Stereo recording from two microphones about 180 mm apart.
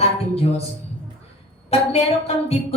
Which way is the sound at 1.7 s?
35° left (ahead or behind).